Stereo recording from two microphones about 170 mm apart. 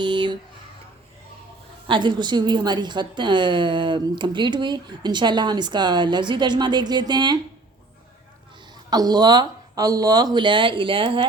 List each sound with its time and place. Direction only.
0.0 s a sound: 25° right (ahead or behind)
1.9 s a woman's voice: 25° right (ahead or behind)
8.9 s a woman's voice: 25° right (ahead or behind)